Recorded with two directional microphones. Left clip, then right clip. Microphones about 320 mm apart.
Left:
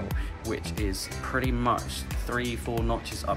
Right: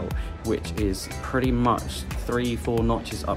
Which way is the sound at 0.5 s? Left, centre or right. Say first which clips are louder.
Right 6 dB; centre.